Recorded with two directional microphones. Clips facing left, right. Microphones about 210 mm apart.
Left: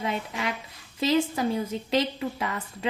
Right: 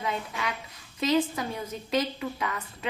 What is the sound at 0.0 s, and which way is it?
A woman's voice, 25° left (ahead or behind).